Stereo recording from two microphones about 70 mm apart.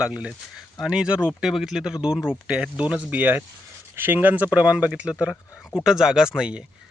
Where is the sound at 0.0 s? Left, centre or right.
Centre.